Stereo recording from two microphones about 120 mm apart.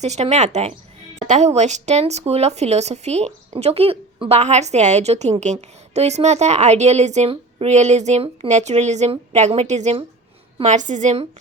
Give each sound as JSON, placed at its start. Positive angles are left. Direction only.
{"t": 0.0, "sound": "a woman's voice", "side_deg": -70}
{"t": 10.6, "sound": "a woman's voice", "side_deg": -85}